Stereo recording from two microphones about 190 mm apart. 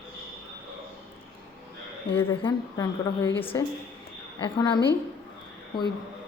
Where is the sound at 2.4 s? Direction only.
25° left (ahead or behind).